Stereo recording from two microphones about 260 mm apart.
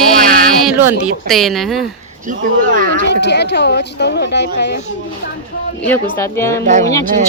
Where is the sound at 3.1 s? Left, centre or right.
Left.